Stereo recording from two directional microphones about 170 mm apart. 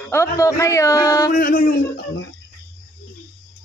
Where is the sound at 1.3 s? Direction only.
55° left (ahead or behind).